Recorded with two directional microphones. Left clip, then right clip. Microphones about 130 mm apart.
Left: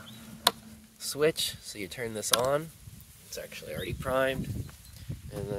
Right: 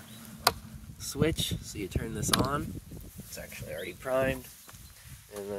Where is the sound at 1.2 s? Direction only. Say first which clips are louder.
Left 3 dB; 50° left (ahead or behind).